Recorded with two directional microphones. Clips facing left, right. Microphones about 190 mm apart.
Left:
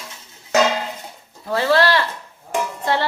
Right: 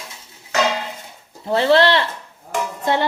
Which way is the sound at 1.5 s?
25° right (ahead or behind).